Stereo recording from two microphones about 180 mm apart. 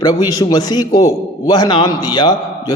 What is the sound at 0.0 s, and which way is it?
A man's voice, 20° left (ahead or behind).